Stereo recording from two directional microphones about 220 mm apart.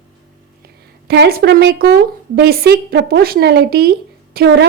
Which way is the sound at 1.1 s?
45° right (ahead or behind).